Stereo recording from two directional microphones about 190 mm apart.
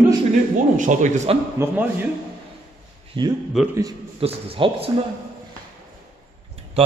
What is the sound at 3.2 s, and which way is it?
Speech, 25° right (ahead or behind).